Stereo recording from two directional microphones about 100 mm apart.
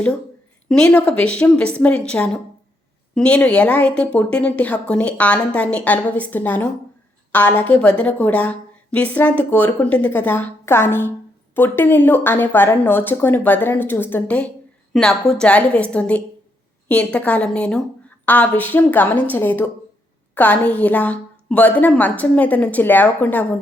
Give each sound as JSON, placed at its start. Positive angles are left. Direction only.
{"t": 0.7, "sound": "a woman's voice", "side_deg": 10}